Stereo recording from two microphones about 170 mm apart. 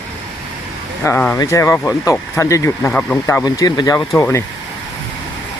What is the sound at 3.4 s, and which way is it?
Speech, 25° left (ahead or behind).